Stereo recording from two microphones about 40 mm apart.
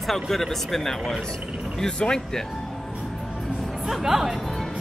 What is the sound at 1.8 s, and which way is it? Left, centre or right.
Speech, left.